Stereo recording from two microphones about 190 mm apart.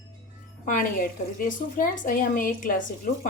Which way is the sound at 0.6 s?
45° left (ahead or behind).